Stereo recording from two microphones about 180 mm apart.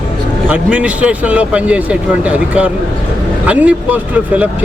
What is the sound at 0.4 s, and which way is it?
Speech, 5° right (ahead or behind).